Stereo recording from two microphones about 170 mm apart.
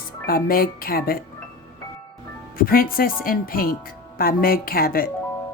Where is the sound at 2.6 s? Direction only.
60° left (ahead or behind).